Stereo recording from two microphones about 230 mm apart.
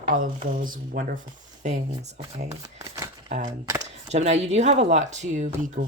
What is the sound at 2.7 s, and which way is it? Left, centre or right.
Shuffling cards, centre.